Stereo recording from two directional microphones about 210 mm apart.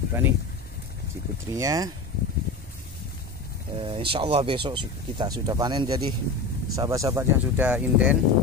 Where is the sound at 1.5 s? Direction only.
15° right (ahead or behind).